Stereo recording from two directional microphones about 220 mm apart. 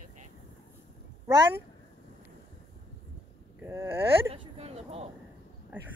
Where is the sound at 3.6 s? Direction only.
10° right (ahead or behind).